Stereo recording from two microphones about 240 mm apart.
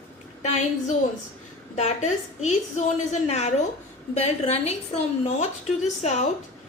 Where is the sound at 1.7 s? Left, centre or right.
Left.